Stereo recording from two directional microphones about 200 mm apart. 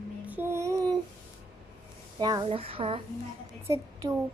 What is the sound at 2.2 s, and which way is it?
Speech, 20° right (ahead or behind).